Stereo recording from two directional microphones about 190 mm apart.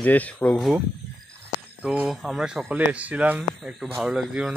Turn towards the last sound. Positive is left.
turn(degrees=-5)  # may be behind; listen again after turning